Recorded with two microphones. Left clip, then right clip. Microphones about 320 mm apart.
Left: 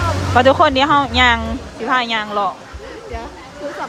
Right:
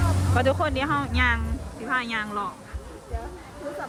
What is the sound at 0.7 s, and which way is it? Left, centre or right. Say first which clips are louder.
Speech: left 12 dB; centre.